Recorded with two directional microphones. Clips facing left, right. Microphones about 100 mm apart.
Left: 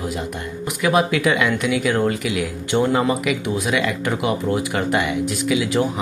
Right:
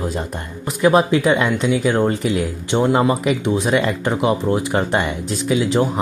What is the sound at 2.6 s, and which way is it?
Speech, 20° right (ahead or behind).